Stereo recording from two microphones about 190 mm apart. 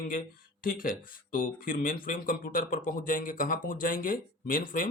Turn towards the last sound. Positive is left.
turn(degrees=50)  # may be behind; listen again after turning